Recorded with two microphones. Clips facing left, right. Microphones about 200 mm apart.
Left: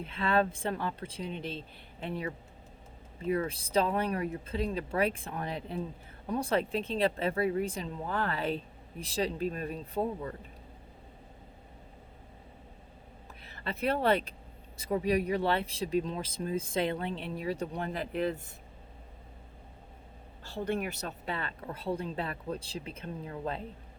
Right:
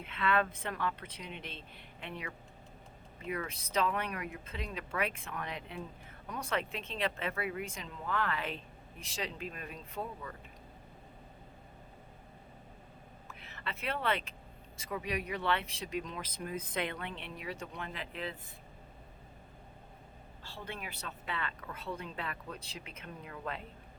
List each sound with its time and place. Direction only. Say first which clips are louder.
0.0 s speech: left 4 dB; 30° left (ahead or behind)
13.2 s speech: left 5 dB; 35° left (ahead or behind)
20.7 s speech: left 11 dB; 45° left (ahead or behind)